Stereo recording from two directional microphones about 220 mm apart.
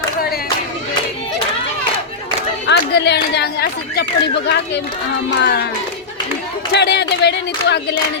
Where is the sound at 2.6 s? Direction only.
50° left (ahead or behind).